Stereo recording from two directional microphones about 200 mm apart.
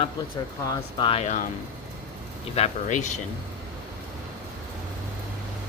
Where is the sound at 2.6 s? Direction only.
35° left (ahead or behind).